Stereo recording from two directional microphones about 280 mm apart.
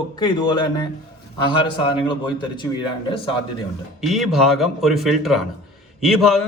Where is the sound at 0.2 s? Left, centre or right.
Centre.